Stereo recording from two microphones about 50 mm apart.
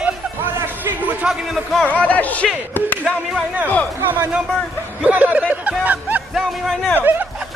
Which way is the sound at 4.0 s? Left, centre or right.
Right.